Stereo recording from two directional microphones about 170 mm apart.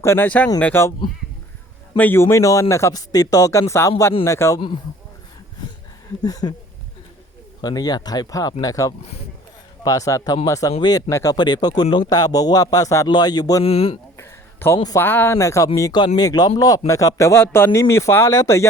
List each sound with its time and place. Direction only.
0.0 s speech: 15° left (ahead or behind)
2.0 s speech: 10° left (ahead or behind)
6.2 s speech: 20° left (ahead or behind)
7.6 s speech: 25° left (ahead or behind)
13.7 s speech: 35° left (ahead or behind)
14.2 s a sound: 15° left (ahead or behind)
14.9 s speech: 10° left (ahead or behind)